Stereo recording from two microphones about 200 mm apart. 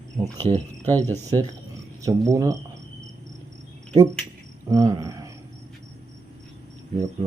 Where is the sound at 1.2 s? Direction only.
15° right (ahead or behind).